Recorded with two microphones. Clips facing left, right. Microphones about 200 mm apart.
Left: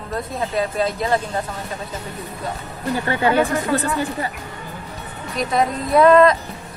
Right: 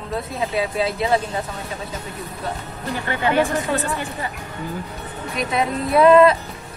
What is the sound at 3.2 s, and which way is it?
Speech, 35° left (ahead or behind).